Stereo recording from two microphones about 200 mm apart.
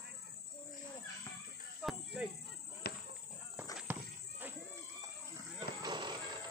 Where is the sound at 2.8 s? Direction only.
50° left (ahead or behind).